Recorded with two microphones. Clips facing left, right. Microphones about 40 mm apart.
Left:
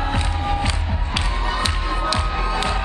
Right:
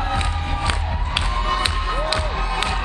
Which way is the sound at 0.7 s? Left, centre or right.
Right.